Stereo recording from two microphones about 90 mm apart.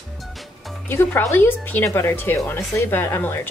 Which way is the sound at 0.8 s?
30° left (ahead or behind).